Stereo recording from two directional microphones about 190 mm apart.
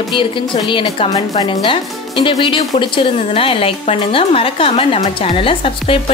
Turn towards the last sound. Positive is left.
turn(degrees=30)  # may be behind; listen again after turning